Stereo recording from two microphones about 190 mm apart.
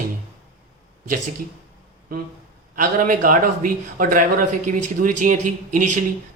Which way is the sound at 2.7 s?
45° right (ahead or behind).